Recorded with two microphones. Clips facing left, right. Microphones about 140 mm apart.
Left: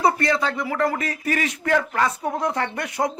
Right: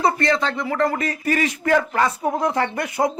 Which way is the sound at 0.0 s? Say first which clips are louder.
Right 1 dB; 5° left (ahead or behind).